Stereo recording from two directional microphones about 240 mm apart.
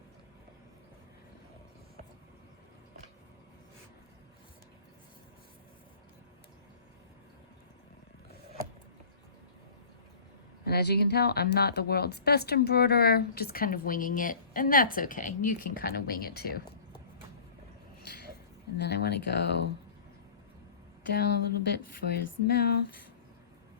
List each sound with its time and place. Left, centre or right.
10.7 s speech: left
18.8 s speech: left
21.1 s speech: left